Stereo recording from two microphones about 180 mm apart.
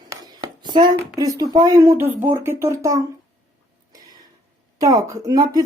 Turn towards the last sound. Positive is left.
turn(degrees=-20)  # may be behind; listen again after turning